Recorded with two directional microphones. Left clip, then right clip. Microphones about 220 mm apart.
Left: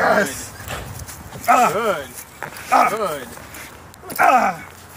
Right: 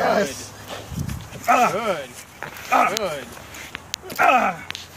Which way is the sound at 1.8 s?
45° right (ahead or behind).